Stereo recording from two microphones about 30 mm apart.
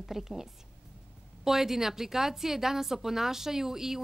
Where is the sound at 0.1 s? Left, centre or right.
Centre.